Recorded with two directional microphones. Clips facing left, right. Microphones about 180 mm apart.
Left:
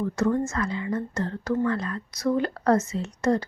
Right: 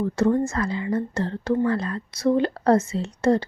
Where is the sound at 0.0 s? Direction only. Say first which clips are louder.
Right 3 dB; 30° right (ahead or behind).